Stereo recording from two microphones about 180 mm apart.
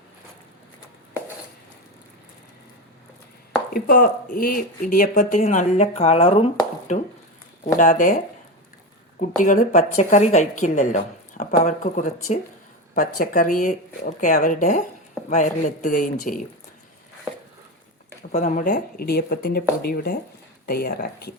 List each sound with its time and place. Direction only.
3.7 s speech: 55° left (ahead or behind); by 6.5 s 35° left (ahead or behind)
7.6 s speech: 45° left (ahead or behind)
9.4 s speech: 45° left (ahead or behind)
18.3 s speech: 40° left (ahead or behind); by 21.3 s 55° left (ahead or behind)